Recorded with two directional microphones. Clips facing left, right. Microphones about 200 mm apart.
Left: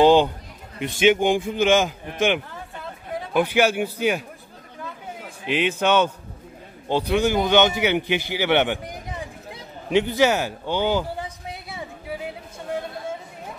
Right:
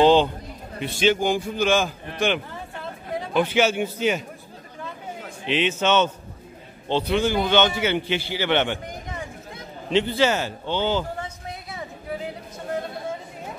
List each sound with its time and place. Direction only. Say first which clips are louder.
0.0 s a man's voice: left 1 dB; 15° left (ahead or behind)
5.4 s a man's voice: left 1 dB; 10° left (ahead or behind)